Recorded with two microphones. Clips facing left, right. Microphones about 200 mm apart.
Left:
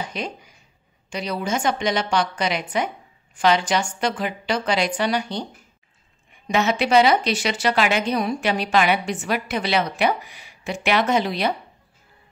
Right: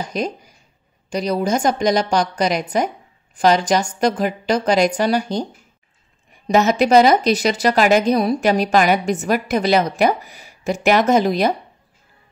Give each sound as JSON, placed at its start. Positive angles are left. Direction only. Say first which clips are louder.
{"t": 0.0, "sound": "a woman's voice", "louder": "right 6 dB", "side_deg": -40}